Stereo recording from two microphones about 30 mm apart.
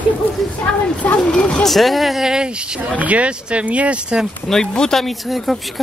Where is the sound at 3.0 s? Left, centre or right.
Right.